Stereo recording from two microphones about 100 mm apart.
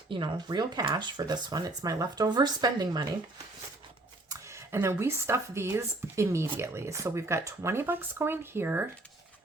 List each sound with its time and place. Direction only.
0.1 s speech: 50° right (ahead or behind)
4.3 s speech: 30° right (ahead or behind)